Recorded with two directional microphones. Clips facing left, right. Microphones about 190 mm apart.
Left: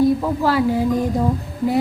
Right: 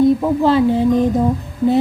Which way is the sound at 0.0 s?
20° right (ahead or behind).